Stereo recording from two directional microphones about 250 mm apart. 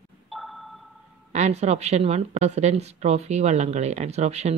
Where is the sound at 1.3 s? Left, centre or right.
Right.